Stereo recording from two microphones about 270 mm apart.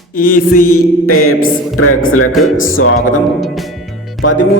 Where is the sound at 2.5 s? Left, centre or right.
Left.